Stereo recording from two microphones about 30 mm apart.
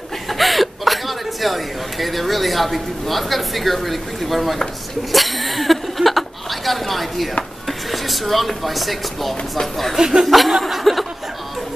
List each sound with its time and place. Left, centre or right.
0.3 s a woman's voice: centre
5.1 s a sound: centre
7.6 s speech: centre
9.9 s speech: centre
10.2 s chuckle: centre